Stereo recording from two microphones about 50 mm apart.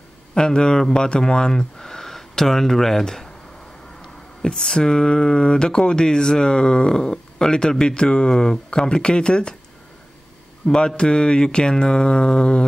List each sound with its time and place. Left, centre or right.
0.3 s speech: centre
4.4 s speech: centre
10.6 s speech: centre